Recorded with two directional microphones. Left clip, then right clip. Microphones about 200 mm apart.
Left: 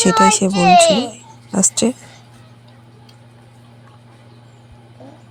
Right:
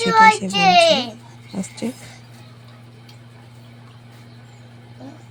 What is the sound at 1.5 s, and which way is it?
Speech, 25° left (ahead or behind).